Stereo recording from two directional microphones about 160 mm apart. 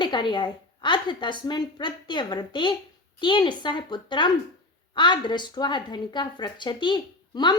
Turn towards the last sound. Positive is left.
turn(degrees=30)  # may be behind; listen again after turning